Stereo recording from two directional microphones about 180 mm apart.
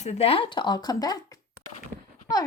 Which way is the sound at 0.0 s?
35° left (ahead or behind).